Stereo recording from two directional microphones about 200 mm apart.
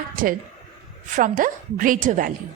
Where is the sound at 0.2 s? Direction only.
45° right (ahead or behind).